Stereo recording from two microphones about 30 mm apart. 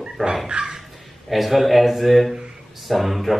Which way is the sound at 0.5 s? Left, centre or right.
Right.